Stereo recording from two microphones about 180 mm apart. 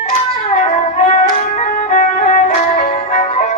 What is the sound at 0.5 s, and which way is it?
Music, 45° left (ahead or behind).